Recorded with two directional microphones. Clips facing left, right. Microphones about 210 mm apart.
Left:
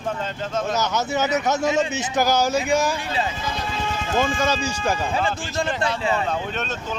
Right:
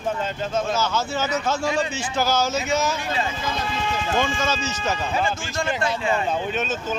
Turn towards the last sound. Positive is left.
turn(degrees=-5)  # may be behind; listen again after turning